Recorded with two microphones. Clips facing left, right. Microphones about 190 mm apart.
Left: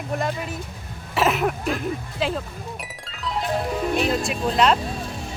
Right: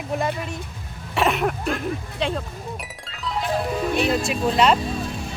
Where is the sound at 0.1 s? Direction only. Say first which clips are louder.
Right 1 dB; centre (ahead or behind).